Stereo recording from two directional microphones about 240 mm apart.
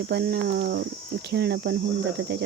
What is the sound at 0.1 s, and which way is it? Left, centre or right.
Speech, right.